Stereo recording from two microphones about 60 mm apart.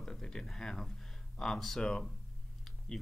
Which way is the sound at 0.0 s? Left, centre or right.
Centre.